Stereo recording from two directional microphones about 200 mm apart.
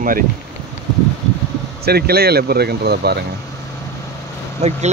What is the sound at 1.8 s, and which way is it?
Speech, 50° right (ahead or behind).